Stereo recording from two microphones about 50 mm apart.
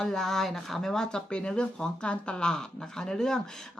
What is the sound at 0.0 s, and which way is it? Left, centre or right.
Speech, centre.